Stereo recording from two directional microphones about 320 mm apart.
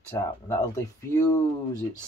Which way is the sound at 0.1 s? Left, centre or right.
Centre.